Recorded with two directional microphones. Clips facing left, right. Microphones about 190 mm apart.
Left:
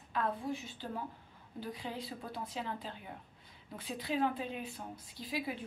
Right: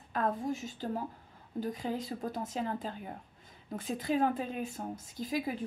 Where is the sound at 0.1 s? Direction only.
45° right (ahead or behind).